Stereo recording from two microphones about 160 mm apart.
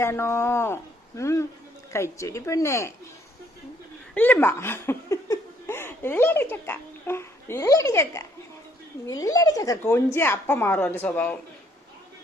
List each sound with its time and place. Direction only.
0.0 s a woman's voice: 15° left (ahead or behind)
4.1 s a woman's voice: 10° left (ahead or behind)